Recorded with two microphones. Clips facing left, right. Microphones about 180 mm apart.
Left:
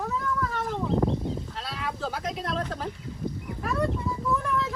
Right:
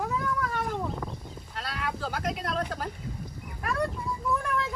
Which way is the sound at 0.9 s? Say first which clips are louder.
Left 12 dB; 30° left (ahead or behind).